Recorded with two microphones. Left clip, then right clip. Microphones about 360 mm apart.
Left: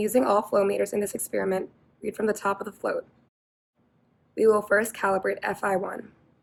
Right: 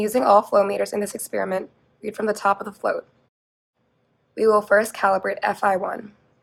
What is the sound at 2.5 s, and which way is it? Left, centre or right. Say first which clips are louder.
Speech: right 5 dB; right.